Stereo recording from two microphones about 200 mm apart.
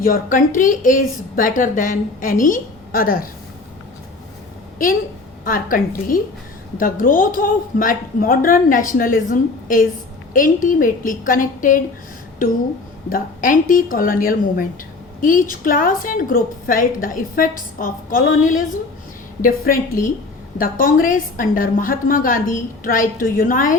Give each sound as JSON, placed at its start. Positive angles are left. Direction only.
{"t": 0.0, "sound": "a woman's voice", "side_deg": 45}
{"t": 5.5, "sound": "a woman's voice", "side_deg": 45}
{"t": 13.1, "sound": "a woman's voice", "side_deg": 45}